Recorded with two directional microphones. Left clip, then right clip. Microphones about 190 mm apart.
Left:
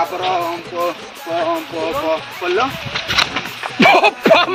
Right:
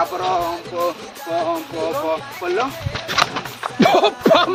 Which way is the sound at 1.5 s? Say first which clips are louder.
Left 2 dB; 35° left (ahead or behind).